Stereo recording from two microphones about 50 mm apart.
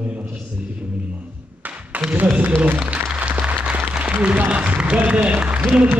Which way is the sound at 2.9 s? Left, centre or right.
Right.